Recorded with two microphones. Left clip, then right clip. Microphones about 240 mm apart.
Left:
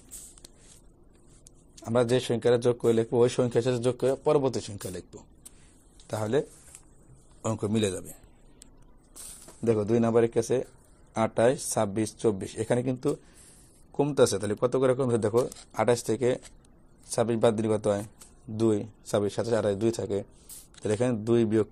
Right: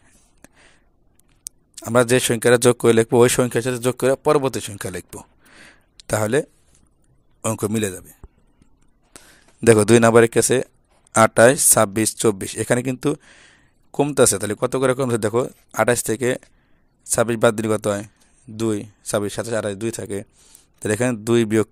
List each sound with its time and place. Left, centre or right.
2.0 s speech: right
7.4 s speech: right
9.8 s speech: right